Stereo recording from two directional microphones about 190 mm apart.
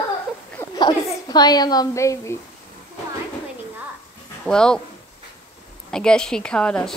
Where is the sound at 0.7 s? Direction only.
20° left (ahead or behind).